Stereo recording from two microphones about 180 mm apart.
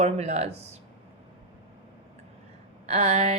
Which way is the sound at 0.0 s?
35° right (ahead or behind).